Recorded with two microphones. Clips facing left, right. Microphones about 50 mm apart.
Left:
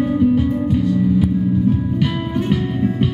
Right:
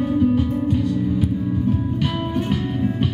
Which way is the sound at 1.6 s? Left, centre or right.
Left.